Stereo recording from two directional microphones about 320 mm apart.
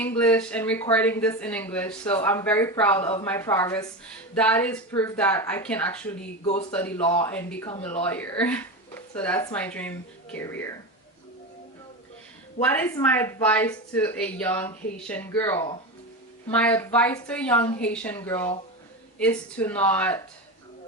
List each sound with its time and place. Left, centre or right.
0.0 s a woman's voice: centre
6.4 s speech: centre
6.7 s speech: centre
12.6 s speech: centre